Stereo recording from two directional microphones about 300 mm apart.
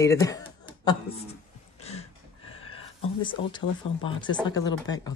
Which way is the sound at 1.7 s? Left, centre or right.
Left.